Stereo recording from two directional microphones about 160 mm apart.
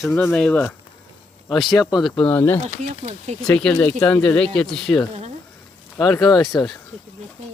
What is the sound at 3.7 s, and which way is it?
Speech, 15° left (ahead or behind).